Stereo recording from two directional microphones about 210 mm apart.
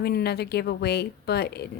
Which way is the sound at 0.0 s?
50° left (ahead or behind).